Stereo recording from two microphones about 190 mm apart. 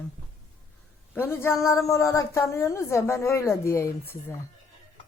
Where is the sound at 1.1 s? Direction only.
10° left (ahead or behind).